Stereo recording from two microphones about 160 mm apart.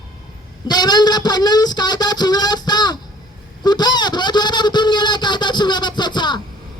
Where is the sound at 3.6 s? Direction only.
25° left (ahead or behind).